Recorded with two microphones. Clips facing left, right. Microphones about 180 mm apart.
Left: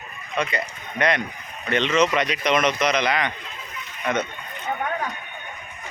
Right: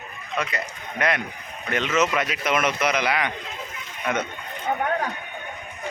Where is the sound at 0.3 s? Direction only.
5° right (ahead or behind).